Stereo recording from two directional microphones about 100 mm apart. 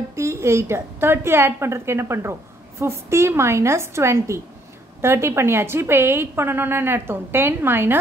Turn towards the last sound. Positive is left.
turn(degrees=-20)  # may be behind; listen again after turning